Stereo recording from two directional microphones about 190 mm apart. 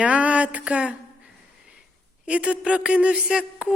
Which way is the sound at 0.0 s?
5° right (ahead or behind).